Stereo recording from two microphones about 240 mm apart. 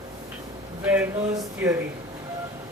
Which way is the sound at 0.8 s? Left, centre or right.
Centre.